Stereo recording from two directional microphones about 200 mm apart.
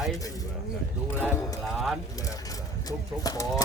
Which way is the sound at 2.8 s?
15° left (ahead or behind).